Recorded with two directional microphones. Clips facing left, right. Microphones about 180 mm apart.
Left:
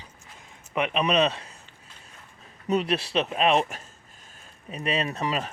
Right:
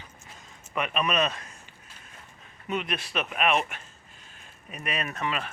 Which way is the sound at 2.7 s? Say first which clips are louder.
Left 6 dB; 35° left (ahead or behind).